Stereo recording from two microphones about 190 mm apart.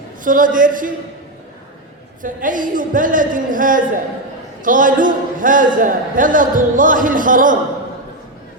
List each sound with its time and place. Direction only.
0.3 s a man's voice: 45° right (ahead or behind)
2.2 s a man's voice: 45° right (ahead or behind)